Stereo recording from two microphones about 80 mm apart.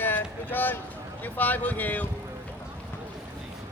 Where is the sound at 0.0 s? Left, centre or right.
Left.